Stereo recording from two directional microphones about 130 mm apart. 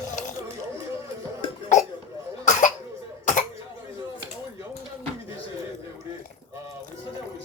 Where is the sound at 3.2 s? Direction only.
70° left (ahead or behind).